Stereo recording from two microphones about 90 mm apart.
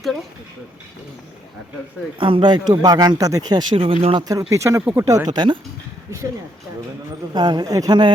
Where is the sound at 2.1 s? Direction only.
70° right (ahead or behind); by 3.8 s 55° right (ahead or behind).